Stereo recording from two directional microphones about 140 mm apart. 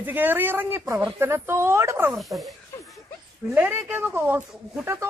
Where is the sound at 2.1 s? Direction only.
Centre (ahead or behind).